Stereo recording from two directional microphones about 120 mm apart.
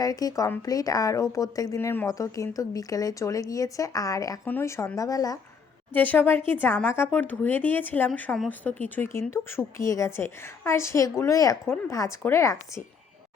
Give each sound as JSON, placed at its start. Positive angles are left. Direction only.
{"t": 0.0, "sound": "speech", "side_deg": 30}
{"t": 5.9, "sound": "speech", "side_deg": 15}